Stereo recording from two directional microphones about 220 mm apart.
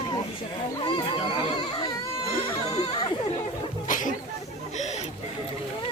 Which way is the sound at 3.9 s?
35° left (ahead or behind).